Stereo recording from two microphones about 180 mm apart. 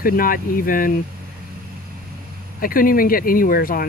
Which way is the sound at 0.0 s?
50° left (ahead or behind).